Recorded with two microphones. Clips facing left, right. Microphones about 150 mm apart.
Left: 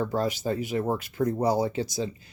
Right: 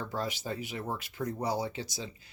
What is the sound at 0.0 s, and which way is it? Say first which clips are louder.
Speech: left 9 dB; 45° left (ahead or behind).